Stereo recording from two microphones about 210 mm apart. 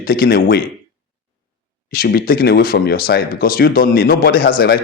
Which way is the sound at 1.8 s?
45° left (ahead or behind).